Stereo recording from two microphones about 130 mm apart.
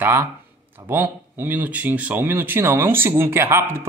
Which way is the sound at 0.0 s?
15° right (ahead or behind).